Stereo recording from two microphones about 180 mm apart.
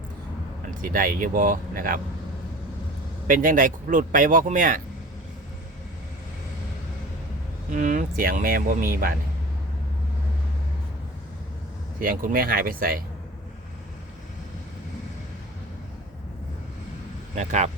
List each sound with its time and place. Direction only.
0.7 s speech: 50° right (ahead or behind)
3.2 s speech: 50° right (ahead or behind)
7.7 s speech: 45° right (ahead or behind)
11.9 s speech: 50° right (ahead or behind)
17.3 s speech: 40° right (ahead or behind)